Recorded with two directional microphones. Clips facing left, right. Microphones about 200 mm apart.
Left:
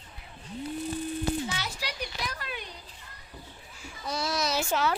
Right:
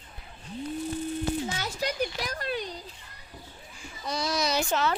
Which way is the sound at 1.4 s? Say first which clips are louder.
Right 4 dB; 45° right (ahead or behind).